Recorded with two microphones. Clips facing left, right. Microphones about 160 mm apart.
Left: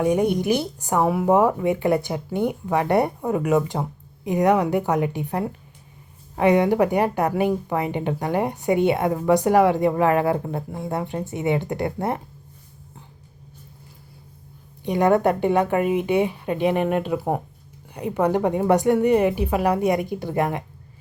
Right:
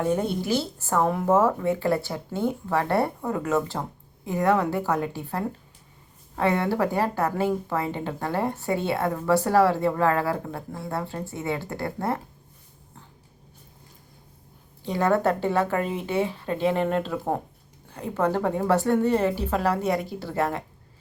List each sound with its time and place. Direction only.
0.0 s a woman's voice: 15° left (ahead or behind)
14.8 s a woman's voice: 15° left (ahead or behind)